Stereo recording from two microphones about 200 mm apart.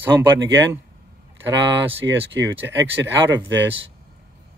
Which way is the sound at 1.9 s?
65° right (ahead or behind).